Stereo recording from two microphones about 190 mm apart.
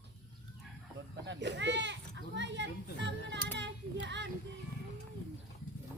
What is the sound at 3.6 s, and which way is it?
Child singing, 70° right (ahead or behind).